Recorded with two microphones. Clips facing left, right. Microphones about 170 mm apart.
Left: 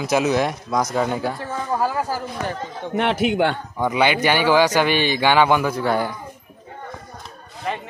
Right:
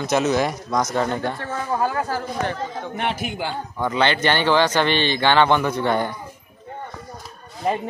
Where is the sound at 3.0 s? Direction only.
65° left (ahead or behind).